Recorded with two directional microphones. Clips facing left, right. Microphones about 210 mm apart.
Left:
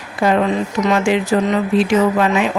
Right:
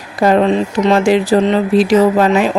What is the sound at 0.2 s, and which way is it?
Speech, 35° right (ahead or behind).